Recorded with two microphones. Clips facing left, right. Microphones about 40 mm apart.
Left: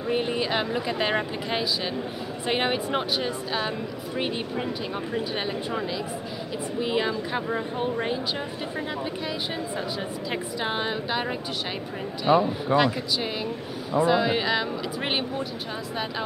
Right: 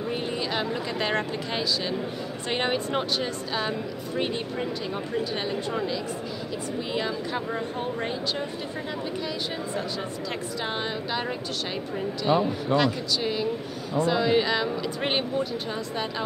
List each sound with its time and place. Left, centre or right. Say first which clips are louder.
0.1 s a woman's voice: left 6 dB; centre